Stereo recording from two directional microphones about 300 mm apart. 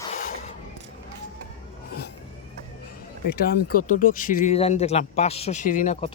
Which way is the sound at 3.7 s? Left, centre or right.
Left.